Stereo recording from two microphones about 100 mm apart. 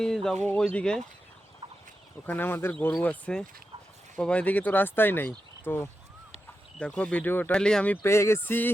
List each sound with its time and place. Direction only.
0.0 s speech: 5° left (ahead or behind)
2.2 s speech: 20° left (ahead or behind)
6.7 s speech: 10° left (ahead or behind)
8.0 s speech: 25° left (ahead or behind)